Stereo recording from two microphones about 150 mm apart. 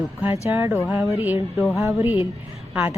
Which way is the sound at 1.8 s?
15° right (ahead or behind).